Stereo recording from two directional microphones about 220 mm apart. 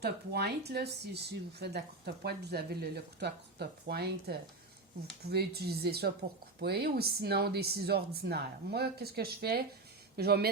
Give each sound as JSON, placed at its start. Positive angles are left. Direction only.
{"t": 0.0, "sound": "speech", "side_deg": -45}